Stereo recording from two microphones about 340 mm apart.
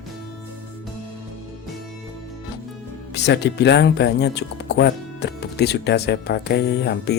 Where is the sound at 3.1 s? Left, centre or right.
Left.